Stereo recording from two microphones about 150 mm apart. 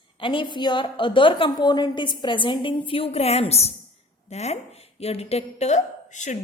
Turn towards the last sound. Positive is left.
turn(degrees=50)  # may be behind; listen again after turning